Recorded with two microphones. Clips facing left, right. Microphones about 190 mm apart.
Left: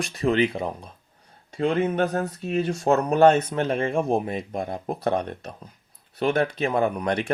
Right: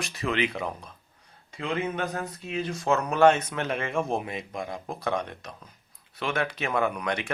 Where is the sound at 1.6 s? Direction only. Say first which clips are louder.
Left 7 dB; 40° left (ahead or behind).